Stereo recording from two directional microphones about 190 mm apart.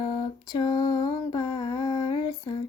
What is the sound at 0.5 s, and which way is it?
Lullaby, 25° left (ahead or behind).